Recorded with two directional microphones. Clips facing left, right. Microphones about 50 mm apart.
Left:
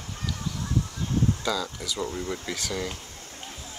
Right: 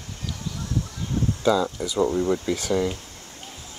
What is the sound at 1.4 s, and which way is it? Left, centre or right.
Speech, right.